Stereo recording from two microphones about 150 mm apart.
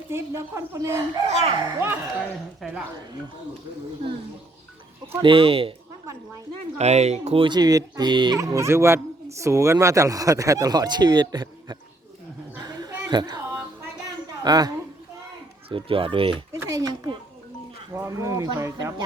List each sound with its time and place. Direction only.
0.1 s speech: 15° right (ahead or behind)
1.3 s speech: 45° right (ahead or behind)
1.8 s speech: 15° right (ahead or behind)
2.6 s speech: 5° right (ahead or behind)
5.2 s a child's voice: 35° right (ahead or behind)
6.7 s speech: 45° right (ahead or behind)
7.4 s speech: 25° right (ahead or behind)
12.6 s a sound: 30° right (ahead or behind)
14.4 s speech: 25° right (ahead or behind)
15.7 s a child's voice: 35° right (ahead or behind)
16.5 s speech: 20° right (ahead or behind)